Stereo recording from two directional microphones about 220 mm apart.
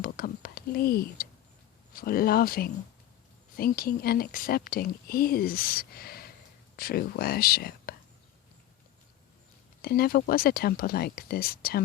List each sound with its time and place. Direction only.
0.0 s whispering: 40° left (ahead or behind)
2.0 s speech: 40° left (ahead or behind)
9.8 s speech: 45° left (ahead or behind)